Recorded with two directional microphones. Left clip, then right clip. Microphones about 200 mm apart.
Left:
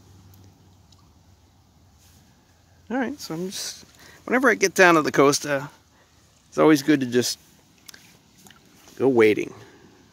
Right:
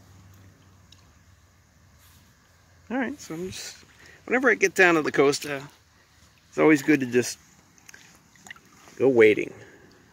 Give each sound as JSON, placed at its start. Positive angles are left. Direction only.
{"t": 2.9, "sound": "speech", "side_deg": 15}
{"t": 3.2, "sound": "speech", "side_deg": 30}
{"t": 4.0, "sound": "speech", "side_deg": 25}
{"t": 6.5, "sound": "speech", "side_deg": 20}
{"t": 8.9, "sound": "speech", "side_deg": 15}